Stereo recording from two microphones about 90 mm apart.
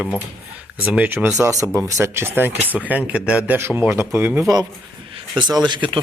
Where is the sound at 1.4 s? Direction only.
35° right (ahead or behind); by 3.6 s 15° right (ahead or behind).